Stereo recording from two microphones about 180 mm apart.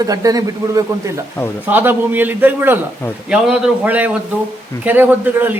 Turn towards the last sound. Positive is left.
turn(degrees=-10)  # may be behind; listen again after turning